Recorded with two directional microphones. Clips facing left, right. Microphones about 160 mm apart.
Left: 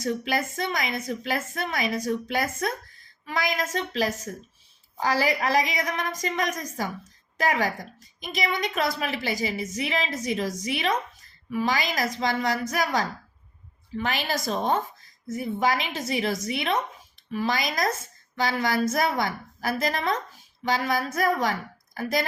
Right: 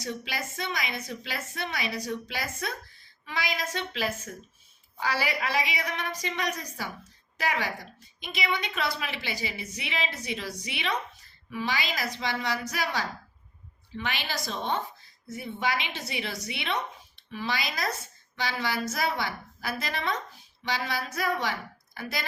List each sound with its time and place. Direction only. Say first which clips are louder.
0.0 s a woman's voice: left 8 dB; 50° left (ahead or behind)